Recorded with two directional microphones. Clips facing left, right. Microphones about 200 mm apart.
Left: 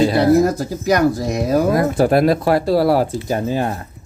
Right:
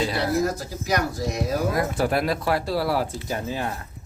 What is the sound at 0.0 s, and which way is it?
Speech, 50° left (ahead or behind).